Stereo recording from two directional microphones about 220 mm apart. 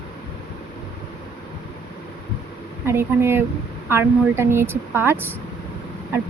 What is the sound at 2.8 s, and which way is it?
Speech, 10° right (ahead or behind).